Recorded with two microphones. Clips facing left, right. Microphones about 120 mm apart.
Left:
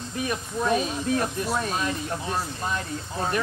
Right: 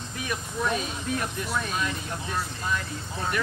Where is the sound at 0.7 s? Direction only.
35° left (ahead or behind).